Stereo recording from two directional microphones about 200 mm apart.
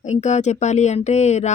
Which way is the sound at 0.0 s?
35° left (ahead or behind).